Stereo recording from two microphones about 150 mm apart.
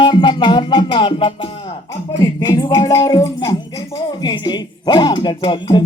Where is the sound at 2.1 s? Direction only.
25° left (ahead or behind).